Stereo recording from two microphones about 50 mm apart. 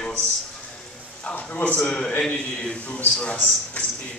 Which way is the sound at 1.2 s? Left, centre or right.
Left.